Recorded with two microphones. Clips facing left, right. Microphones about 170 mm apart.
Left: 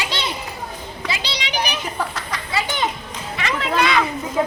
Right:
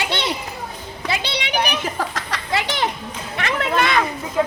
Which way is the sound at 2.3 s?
70° right (ahead or behind).